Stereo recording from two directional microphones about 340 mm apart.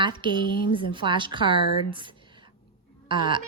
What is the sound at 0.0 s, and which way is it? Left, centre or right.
A woman's voice, centre.